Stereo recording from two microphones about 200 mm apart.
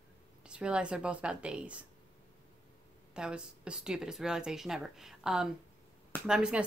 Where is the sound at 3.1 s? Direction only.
5° right (ahead or behind).